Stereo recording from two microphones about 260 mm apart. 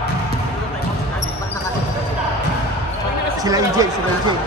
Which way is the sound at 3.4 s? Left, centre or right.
Centre.